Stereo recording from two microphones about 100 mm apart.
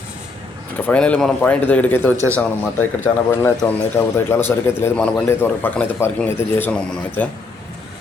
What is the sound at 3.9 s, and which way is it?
Speech, 25° left (ahead or behind).